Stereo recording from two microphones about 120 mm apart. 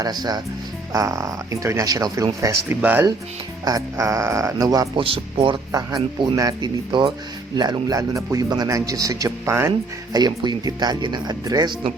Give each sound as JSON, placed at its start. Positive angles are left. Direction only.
{"t": 0.0, "sound": "a man's voice", "side_deg": -35}
{"t": 2.8, "sound": "speech", "side_deg": -15}
{"t": 3.6, "sound": "speech", "side_deg": -30}
{"t": 4.9, "sound": "a man's voice", "side_deg": -45}